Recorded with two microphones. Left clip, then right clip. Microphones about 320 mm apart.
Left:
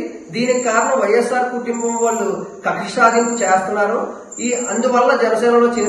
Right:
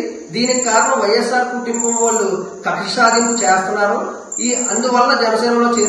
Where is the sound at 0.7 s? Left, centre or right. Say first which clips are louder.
Right 3 dB; left.